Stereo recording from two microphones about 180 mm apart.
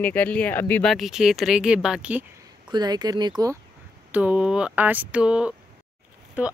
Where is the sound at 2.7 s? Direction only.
20° right (ahead or behind).